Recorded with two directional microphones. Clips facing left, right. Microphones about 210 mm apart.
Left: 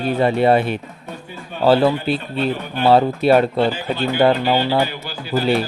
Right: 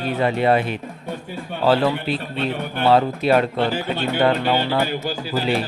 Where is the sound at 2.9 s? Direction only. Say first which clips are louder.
Left 4 dB; 30° left (ahead or behind).